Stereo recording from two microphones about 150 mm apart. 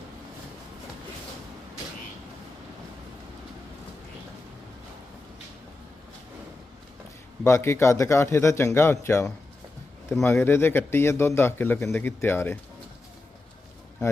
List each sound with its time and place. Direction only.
7.4 s a man's voice: 20° left (ahead or behind)